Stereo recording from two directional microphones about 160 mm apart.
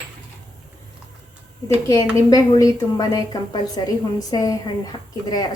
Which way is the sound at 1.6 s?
20° left (ahead or behind).